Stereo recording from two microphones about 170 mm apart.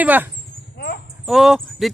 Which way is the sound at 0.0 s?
10° right (ahead or behind).